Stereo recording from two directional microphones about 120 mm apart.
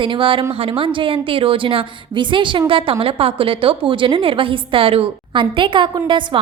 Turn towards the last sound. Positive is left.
turn(degrees=-40)  # may be behind; listen again after turning